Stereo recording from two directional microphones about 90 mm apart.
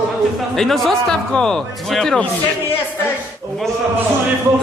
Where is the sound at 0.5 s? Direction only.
5° left (ahead or behind).